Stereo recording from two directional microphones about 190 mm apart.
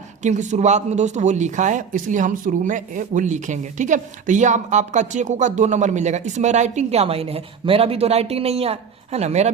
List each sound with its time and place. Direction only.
0.2 s speech: 40° right (ahead or behind)